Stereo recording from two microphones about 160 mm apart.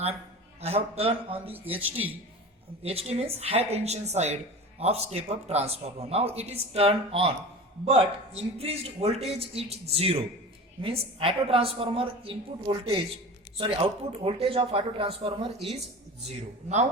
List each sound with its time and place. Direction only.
0.6 s a man's voice: 40° right (ahead or behind)
1.7 s speech: 10° right (ahead or behind)
2.8 s a man's voice: 40° right (ahead or behind)
16.3 s speech: 45° right (ahead or behind)